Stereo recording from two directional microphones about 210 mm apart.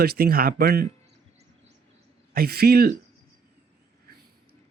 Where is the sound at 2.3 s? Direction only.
45° right (ahead or behind).